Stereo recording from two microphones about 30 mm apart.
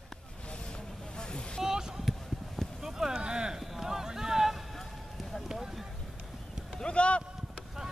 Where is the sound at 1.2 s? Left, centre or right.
Left.